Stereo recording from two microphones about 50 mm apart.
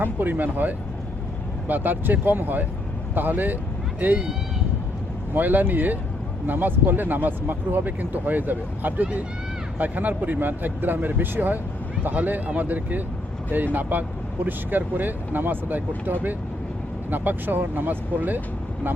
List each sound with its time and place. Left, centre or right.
0.0 s speech: right
5.3 s speech: right
17.1 s speech: right